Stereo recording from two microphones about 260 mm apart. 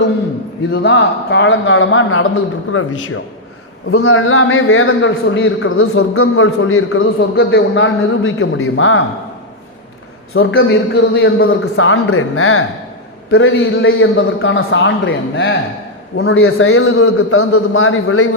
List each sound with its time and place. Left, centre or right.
0.7 s a man's voice: left
3.9 s a man's voice: left
7.2 s a man's voice: left
10.3 s a man's voice: left